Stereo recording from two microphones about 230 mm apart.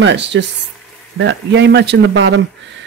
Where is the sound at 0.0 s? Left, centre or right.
Right.